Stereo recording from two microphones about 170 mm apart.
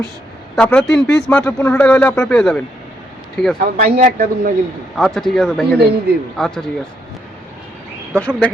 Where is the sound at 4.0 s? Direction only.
55° right (ahead or behind).